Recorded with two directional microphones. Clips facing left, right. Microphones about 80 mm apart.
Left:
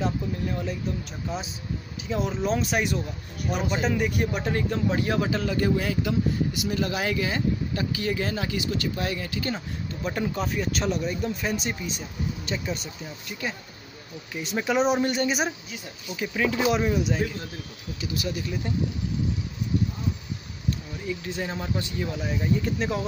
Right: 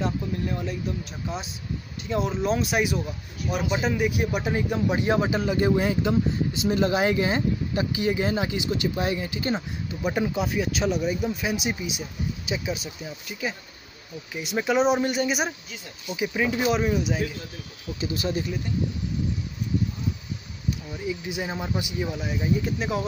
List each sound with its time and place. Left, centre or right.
0.0 s a man's voice: centre; by 9.6 s right
9.8 s speech: centre
16.6 s speech: centre
18.0 s speech: right
21.1 s speech: centre